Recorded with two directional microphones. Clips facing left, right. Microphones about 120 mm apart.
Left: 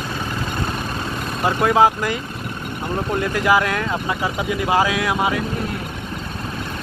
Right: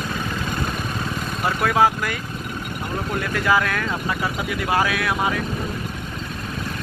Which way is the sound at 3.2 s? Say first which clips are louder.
Left 2 dB; 20° left (ahead or behind).